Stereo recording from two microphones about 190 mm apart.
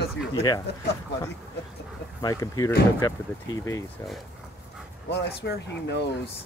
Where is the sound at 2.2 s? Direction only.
20° left (ahead or behind).